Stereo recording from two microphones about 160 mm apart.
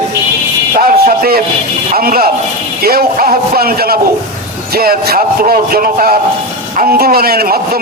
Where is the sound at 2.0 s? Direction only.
70° right (ahead or behind).